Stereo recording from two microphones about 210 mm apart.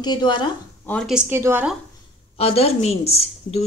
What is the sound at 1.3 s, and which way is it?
Speech, 10° right (ahead or behind).